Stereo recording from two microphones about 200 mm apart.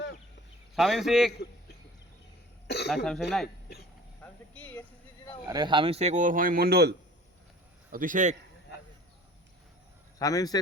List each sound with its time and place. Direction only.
0.8 s speech: centre (ahead or behind)
2.6 s throat clearing: 55° left (ahead or behind)
2.9 s speech: centre (ahead or behind)
4.2 s a sound: 10° left (ahead or behind)
5.5 s speech: 20° right (ahead or behind); by 6.9 s 50° right (ahead or behind)
7.9 s speech: 40° right (ahead or behind)
10.2 s speech: 15° left (ahead or behind)